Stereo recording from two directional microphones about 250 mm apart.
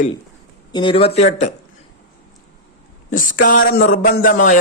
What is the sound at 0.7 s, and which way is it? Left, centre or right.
Speech, centre.